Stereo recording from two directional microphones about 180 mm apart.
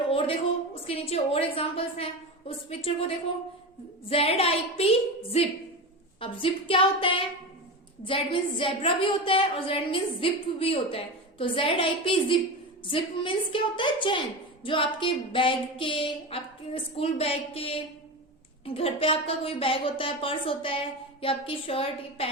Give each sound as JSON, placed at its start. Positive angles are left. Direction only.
{"t": 0.1, "sound": "a woman's voice", "side_deg": 30}
{"t": 4.1, "sound": "a woman's voice", "side_deg": 35}